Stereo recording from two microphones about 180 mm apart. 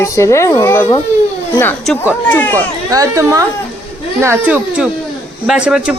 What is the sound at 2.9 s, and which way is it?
A woman's voice, 20° right (ahead or behind).